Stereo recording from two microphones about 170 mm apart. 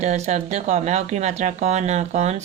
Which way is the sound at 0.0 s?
40° right (ahead or behind).